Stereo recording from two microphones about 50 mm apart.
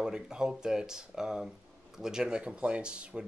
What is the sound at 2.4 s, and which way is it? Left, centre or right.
Speech, right.